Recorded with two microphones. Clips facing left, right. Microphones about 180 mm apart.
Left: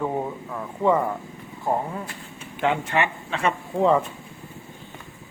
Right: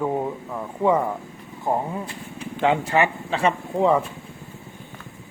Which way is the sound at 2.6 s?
35° right (ahead or behind).